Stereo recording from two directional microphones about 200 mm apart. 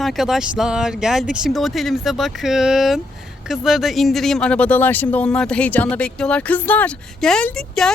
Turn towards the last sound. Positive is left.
turn(degrees=5)  # may be behind; listen again after turning